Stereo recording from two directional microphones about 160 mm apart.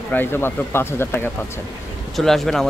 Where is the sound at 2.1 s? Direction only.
Centre (ahead or behind).